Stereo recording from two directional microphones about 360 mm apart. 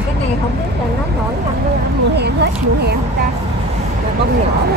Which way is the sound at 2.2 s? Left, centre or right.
Right.